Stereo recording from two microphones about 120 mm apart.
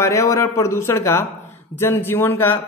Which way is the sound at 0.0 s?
25° left (ahead or behind).